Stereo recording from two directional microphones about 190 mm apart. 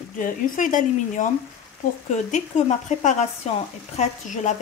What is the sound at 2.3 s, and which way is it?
Speech, 40° left (ahead or behind).